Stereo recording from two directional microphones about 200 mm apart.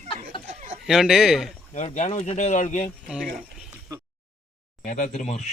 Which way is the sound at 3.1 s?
Centre (ahead or behind).